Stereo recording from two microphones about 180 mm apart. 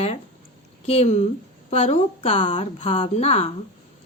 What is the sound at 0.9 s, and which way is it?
Speech, 35° left (ahead or behind).